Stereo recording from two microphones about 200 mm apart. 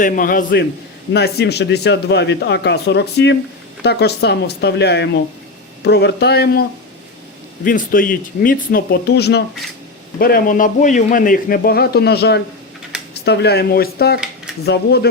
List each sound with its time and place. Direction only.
0.0 s a man's voice: 40° left (ahead or behind)
1.1 s a man's voice: 55° left (ahead or behind)